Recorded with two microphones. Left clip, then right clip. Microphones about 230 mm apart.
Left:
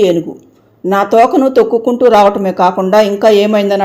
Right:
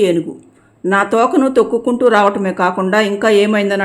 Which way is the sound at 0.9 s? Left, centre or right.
Centre.